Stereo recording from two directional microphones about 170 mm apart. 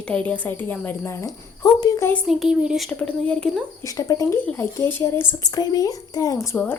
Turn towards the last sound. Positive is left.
turn(degrees=10)  # may be behind; listen again after turning